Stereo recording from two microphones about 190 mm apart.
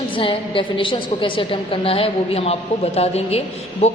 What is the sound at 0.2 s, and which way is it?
A woman's voice, 25° left (ahead or behind).